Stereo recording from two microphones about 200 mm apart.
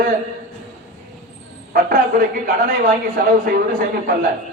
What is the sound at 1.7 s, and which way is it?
A woman's voice, 45° right (ahead or behind).